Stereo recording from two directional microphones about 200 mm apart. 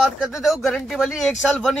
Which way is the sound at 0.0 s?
Centre (ahead or behind).